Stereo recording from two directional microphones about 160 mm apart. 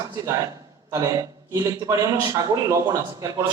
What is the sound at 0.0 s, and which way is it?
A man's voice, 20° right (ahead or behind).